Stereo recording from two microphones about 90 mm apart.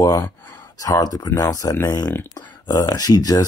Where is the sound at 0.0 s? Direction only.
40° left (ahead or behind).